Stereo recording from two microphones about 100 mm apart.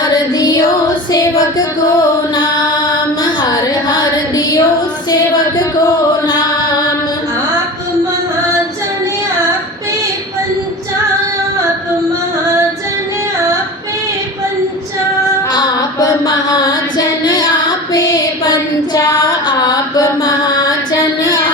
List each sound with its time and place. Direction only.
0.0 s music: 40° left (ahead or behind)
3.4 s a sound: 40° left (ahead or behind)
5.3 s music: 40° left (ahead or behind)
15.5 s music: 40° left (ahead or behind)
18.9 s mantra: 40° left (ahead or behind)